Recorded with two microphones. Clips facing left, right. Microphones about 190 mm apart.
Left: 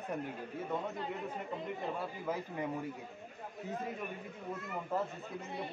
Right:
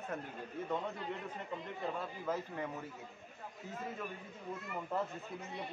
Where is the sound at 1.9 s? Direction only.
10° left (ahead or behind).